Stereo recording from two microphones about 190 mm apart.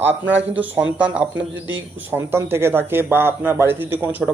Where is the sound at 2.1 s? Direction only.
15° right (ahead or behind).